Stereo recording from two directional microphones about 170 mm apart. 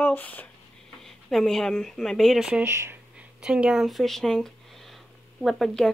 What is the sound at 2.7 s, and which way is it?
Speech, 15° right (ahead or behind).